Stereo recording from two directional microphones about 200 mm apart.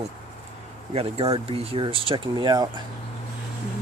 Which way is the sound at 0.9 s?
30° right (ahead or behind).